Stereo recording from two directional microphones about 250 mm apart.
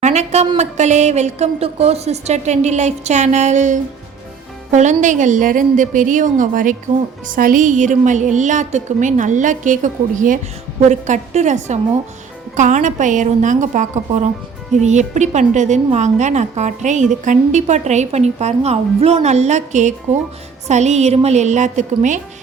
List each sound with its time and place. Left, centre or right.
0.0 s a woman's voice: right